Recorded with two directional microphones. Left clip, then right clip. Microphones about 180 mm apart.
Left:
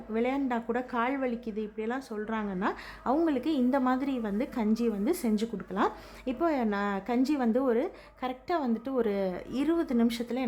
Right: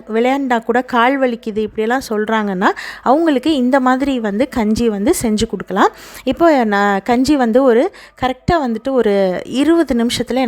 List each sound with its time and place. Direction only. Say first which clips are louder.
0.1 s a woman's voice: right 15 dB; 40° right (ahead or behind)